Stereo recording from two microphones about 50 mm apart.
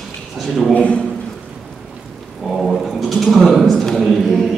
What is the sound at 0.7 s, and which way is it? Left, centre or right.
Speech, left.